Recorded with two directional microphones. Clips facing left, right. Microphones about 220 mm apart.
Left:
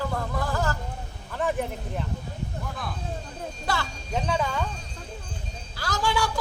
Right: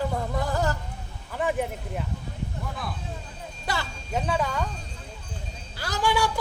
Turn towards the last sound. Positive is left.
turn(degrees=-15)  # may be behind; listen again after turning